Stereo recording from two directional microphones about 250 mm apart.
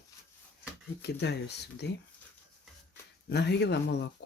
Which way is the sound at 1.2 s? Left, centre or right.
Left.